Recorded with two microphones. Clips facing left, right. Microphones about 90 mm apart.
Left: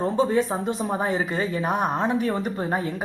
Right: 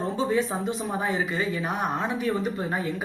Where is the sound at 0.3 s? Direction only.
40° left (ahead or behind).